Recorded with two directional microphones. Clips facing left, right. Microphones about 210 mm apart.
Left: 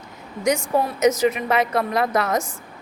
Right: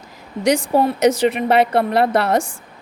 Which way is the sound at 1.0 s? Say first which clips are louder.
Right 3 dB; 30° right (ahead or behind).